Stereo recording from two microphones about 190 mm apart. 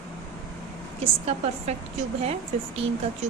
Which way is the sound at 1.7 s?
35° right (ahead or behind).